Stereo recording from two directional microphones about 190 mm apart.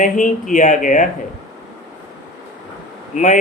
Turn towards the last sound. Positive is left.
turn(degrees=40)  # may be behind; listen again after turning